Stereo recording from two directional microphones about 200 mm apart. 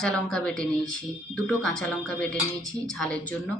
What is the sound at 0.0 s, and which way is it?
A woman's voice, 5° left (ahead or behind).